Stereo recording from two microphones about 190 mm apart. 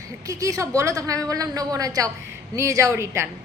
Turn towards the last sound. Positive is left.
turn(degrees=-15)  # may be behind; listen again after turning